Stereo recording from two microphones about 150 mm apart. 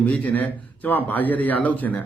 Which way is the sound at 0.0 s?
10° left (ahead or behind).